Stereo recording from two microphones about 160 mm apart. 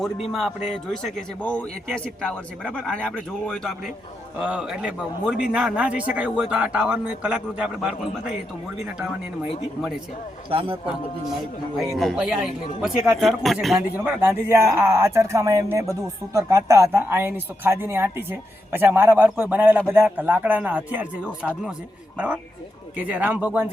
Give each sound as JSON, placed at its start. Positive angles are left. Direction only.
{"t": 0.3, "sound": "a man's voice", "side_deg": 0}
{"t": 10.5, "sound": "a man's voice", "side_deg": -35}
{"t": 11.8, "sound": "a man's voice", "side_deg": 0}
{"t": 13.9, "sound": "speech", "side_deg": -15}
{"t": 23.0, "sound": "speech", "side_deg": -10}